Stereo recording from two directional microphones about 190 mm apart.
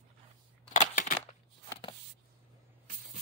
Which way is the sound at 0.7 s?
45° left (ahead or behind).